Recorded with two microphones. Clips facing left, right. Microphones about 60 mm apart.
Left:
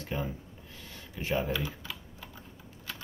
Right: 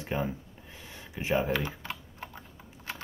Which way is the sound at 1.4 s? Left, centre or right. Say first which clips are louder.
Right 3 dB; right.